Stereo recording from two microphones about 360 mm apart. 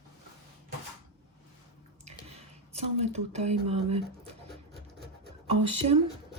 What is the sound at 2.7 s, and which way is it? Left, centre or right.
Speech, centre.